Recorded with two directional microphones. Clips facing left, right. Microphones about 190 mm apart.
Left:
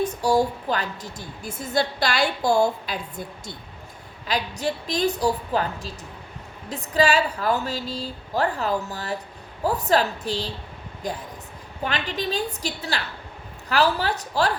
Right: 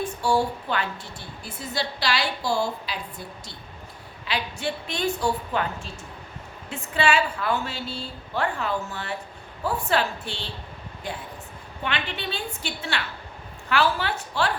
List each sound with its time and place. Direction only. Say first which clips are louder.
0.0 s a woman's voice: left 3 dB; 40° left (ahead or behind)